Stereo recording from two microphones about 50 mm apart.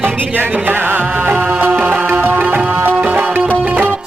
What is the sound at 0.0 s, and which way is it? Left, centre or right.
Music, right.